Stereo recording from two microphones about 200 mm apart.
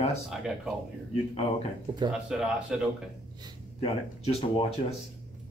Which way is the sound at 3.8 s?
30° left (ahead or behind).